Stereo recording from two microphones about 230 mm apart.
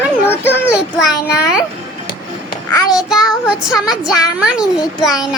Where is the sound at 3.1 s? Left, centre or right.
Centre.